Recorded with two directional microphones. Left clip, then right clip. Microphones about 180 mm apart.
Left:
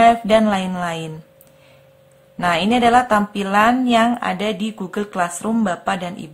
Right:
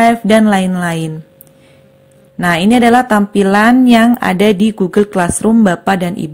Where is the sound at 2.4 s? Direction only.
25° right (ahead or behind).